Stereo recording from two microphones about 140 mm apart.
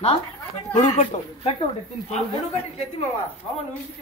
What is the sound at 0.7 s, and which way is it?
Speech, 50° left (ahead or behind).